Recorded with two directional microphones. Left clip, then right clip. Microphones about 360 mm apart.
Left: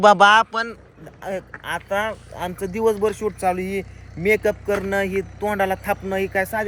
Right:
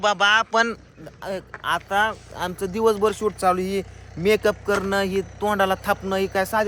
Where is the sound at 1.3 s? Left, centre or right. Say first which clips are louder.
Right 2 dB; centre.